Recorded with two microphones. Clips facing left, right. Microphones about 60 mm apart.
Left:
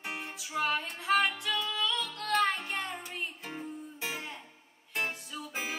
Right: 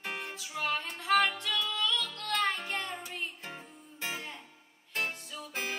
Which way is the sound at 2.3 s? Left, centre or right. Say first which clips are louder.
Left 3 dB; centre.